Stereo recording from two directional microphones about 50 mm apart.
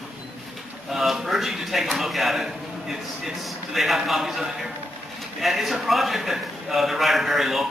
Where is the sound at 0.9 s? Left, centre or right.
Centre.